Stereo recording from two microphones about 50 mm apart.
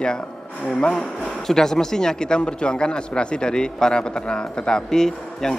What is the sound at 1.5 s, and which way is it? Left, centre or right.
A man's voice, centre.